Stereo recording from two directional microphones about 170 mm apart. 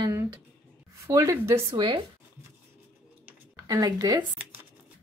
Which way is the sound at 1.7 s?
30° right (ahead or behind).